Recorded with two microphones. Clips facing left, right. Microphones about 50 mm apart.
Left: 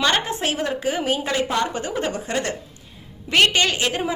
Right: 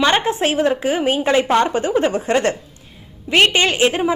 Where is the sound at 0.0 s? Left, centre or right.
Right.